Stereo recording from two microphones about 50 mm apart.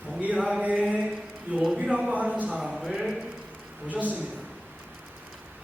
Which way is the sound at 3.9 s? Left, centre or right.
Right.